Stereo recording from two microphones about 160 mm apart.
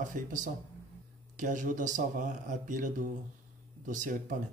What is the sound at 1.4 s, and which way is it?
Speech, 55° right (ahead or behind).